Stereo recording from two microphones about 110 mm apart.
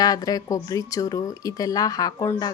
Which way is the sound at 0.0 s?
35° left (ahead or behind).